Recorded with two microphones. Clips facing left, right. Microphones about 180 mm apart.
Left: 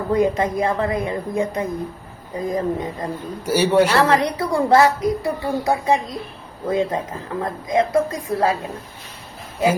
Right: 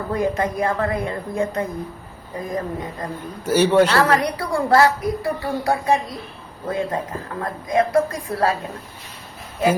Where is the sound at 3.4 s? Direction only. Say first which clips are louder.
Right 1 dB; 10° left (ahead or behind).